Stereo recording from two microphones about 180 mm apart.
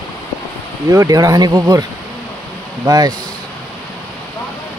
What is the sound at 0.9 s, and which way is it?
Speech, 20° right (ahead or behind).